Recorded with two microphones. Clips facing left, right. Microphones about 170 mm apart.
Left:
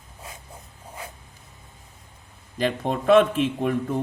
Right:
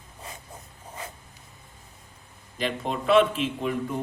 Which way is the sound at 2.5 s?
50° left (ahead or behind).